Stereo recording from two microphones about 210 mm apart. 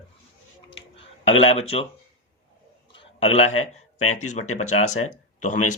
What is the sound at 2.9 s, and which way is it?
A man's voice, 30° left (ahead or behind).